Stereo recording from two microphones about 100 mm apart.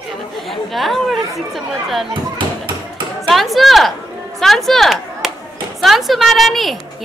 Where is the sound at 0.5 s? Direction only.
Centre (ahead or behind).